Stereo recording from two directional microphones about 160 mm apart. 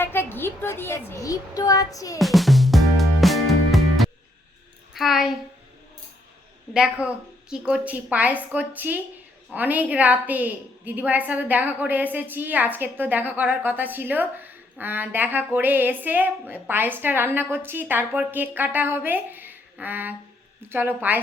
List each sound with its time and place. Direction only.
0.0 s a woman's voice: 15° left (ahead or behind)
2.1 s music: centre (ahead or behind)
4.9 s a woman's voice: centre (ahead or behind)
6.7 s a woman's voice: 5° right (ahead or behind)